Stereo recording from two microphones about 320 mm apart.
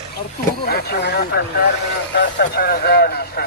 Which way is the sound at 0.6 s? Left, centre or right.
Left.